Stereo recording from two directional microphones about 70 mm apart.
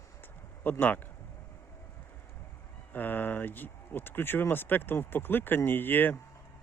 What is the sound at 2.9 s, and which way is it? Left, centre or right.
Speech, left.